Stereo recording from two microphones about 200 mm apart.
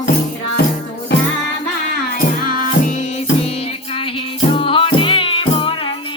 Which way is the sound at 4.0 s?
25° left (ahead or behind).